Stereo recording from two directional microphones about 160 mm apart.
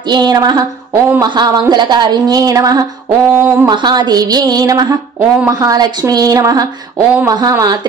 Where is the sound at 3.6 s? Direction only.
25° right (ahead or behind).